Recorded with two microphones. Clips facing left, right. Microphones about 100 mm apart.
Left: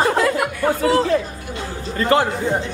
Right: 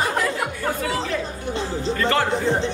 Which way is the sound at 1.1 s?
30° left (ahead or behind).